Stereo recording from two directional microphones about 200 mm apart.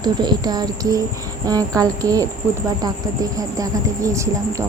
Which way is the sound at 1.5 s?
15° right (ahead or behind).